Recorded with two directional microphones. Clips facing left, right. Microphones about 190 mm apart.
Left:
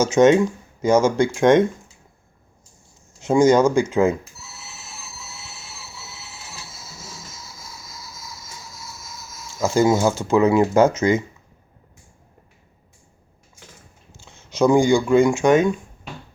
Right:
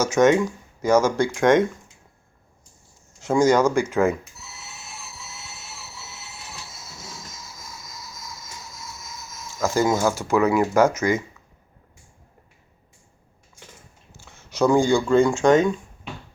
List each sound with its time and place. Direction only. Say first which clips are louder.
0.0 s speech: left 3 dB; 20° left (ahead or behind)
3.2 s speech: left 3 dB; 20° left (ahead or behind)
9.6 s speech: left 3 dB; 15° left (ahead or behind)
14.3 s speech: left 2 dB; 20° left (ahead or behind)